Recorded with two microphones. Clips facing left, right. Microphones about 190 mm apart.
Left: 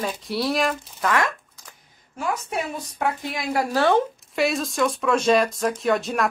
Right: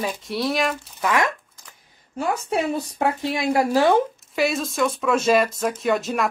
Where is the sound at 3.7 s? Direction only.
15° right (ahead or behind).